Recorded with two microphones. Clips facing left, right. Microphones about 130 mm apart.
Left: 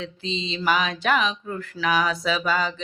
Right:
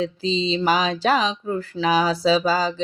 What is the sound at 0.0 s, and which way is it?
Speech, 35° right (ahead or behind).